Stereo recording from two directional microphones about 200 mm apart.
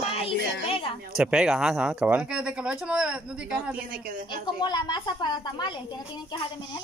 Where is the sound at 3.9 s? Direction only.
50° right (ahead or behind).